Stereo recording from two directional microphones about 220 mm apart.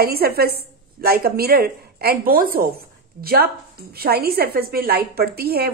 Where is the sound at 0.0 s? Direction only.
45° right (ahead or behind).